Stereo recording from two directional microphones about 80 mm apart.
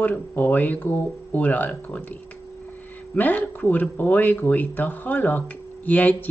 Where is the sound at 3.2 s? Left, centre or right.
Left.